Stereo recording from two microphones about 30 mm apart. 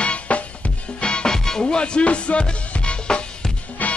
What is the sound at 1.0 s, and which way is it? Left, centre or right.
Music, left.